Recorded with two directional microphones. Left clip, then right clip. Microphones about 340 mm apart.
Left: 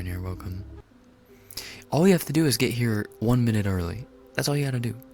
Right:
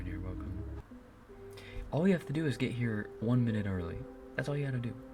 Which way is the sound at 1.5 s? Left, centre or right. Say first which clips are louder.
Left 10 dB; left.